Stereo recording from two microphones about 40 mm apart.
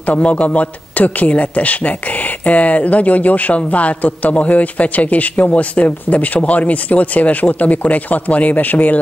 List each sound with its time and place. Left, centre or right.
0.0 s a man's voice: left